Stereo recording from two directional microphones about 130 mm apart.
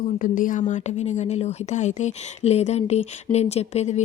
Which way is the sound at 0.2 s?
90° left.